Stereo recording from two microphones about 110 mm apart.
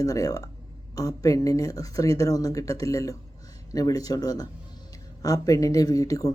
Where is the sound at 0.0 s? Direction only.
30° left (ahead or behind).